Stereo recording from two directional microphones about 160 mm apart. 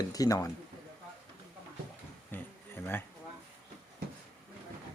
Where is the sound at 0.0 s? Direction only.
20° left (ahead or behind).